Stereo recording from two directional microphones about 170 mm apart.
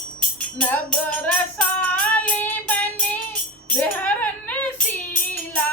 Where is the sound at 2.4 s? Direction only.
10° left (ahead or behind).